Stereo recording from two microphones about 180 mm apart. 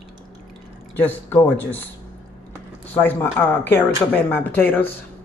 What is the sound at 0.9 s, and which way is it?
Speech, 10° left (ahead or behind).